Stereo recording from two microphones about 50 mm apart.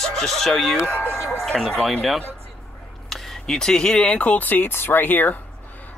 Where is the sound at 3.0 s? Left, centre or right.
Centre.